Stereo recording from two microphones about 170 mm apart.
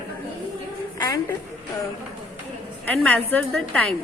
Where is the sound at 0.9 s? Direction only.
20° left (ahead or behind).